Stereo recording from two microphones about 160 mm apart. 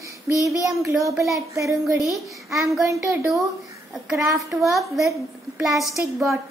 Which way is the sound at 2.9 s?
Centre (ahead or behind).